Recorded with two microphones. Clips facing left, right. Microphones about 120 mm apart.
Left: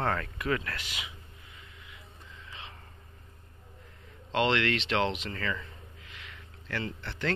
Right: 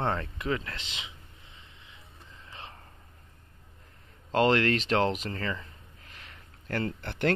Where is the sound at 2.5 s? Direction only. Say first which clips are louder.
Right 2 dB; 40° right (ahead or behind).